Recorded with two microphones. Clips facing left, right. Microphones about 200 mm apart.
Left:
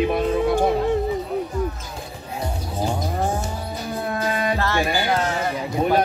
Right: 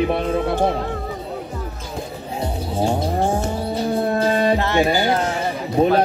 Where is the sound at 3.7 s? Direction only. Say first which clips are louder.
Right 7 dB; 30° right (ahead or behind).